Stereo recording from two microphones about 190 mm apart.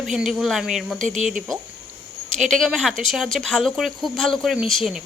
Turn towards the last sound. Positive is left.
turn(degrees=0)  # may be behind; listen again after turning